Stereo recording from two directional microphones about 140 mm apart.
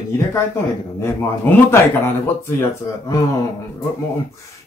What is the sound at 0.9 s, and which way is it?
Speech, 15° left (ahead or behind).